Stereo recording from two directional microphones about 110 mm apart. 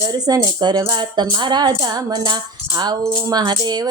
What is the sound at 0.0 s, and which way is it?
Speech, 30° right (ahead or behind).